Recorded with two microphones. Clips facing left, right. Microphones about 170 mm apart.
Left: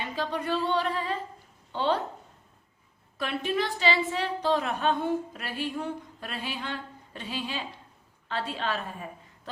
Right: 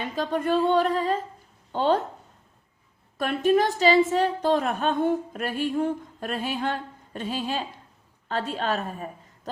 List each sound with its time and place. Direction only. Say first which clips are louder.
0.2 s a woman's voice: right 6 dB; 50° right (ahead or behind)
3.2 s a woman's voice: right 8 dB; 45° right (ahead or behind)